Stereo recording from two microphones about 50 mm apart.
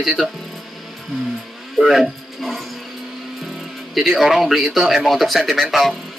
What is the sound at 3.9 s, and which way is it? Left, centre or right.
Speech, centre.